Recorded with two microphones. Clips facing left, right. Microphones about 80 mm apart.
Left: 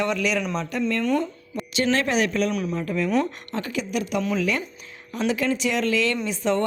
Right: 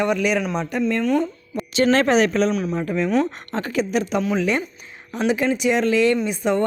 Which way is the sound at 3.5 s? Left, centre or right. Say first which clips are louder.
Right 5 dB; right.